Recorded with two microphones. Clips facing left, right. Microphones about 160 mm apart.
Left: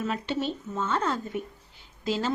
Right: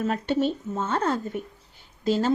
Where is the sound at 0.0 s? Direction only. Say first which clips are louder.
Right 5 dB; 45° right (ahead or behind).